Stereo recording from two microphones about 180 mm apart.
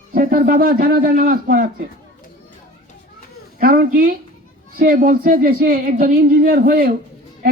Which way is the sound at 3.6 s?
55° right (ahead or behind).